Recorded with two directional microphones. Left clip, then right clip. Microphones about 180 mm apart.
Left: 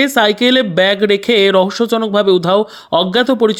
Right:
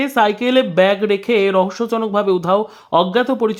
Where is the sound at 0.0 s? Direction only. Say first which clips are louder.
Left 4 dB; 15° left (ahead or behind).